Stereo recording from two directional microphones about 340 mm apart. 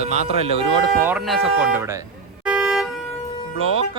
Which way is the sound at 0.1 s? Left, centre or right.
Centre.